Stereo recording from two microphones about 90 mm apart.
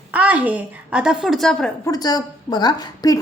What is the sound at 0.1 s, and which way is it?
Speech, 15° right (ahead or behind).